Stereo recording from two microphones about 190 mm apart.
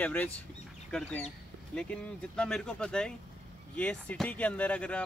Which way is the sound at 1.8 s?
5° left (ahead or behind).